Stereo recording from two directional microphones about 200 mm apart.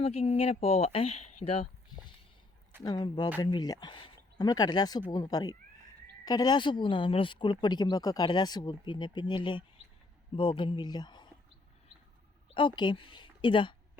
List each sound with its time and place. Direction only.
0.0 s speech: 30° left (ahead or behind)
2.8 s speech: 20° left (ahead or behind)
12.5 s speech: 25° left (ahead or behind)